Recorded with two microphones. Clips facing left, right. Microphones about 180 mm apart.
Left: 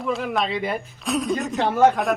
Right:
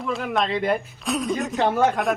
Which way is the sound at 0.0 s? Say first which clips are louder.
Even; centre (ahead or behind).